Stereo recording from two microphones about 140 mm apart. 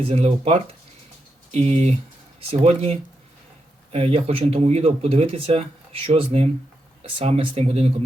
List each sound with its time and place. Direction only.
0.0 s speech: 45° right (ahead or behind)